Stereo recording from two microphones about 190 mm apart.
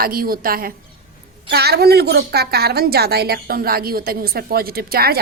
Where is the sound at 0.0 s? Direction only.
50° right (ahead or behind).